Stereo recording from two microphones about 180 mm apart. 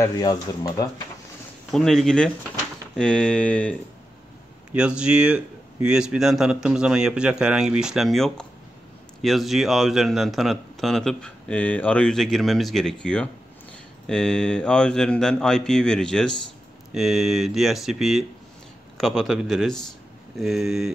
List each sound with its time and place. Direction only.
0.0 s speech: 20° left (ahead or behind)
1.7 s speech: centre (ahead or behind)
4.7 s speech: 5° right (ahead or behind)